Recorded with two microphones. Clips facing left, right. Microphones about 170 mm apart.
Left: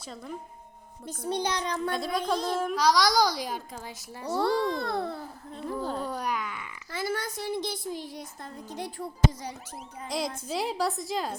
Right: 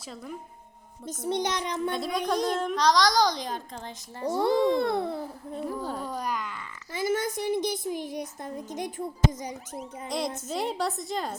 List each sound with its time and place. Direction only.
1.0 s a woman's voice: 20° right (ahead or behind)
1.9 s a woman's voice: centre (ahead or behind)
2.2 s a child's voice: 15° right (ahead or behind)
2.6 s a child's voice: 5° left (ahead or behind)
4.3 s a woman's voice: 20° right (ahead or behind)
5.6 s a woman's voice: 5° right (ahead or behind)
6.1 s a sound: 5° left (ahead or behind)
6.9 s a woman's voice: 20° right (ahead or behind)
10.1 s a woman's voice: centre (ahead or behind)